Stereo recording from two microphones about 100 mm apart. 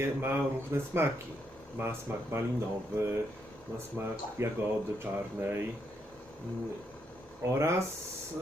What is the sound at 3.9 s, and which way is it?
Speech, 25° right (ahead or behind).